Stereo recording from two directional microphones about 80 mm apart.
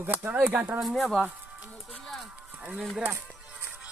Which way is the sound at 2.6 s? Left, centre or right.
Centre.